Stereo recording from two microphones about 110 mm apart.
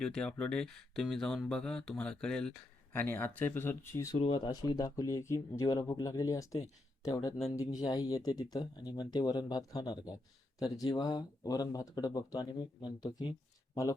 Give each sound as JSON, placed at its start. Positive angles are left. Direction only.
{"t": 0.0, "sound": "speech", "side_deg": 5}
{"t": 4.2, "sound": "speech", "side_deg": 45}